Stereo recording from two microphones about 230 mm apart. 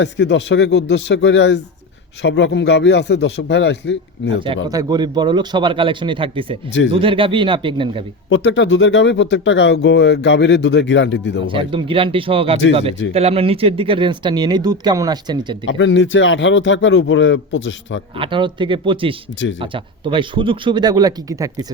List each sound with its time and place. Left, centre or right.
0.0 s speech: left
4.4 s speech: centre
8.3 s speech: left
11.5 s speech: right
15.6 s speech: left
18.2 s speech: right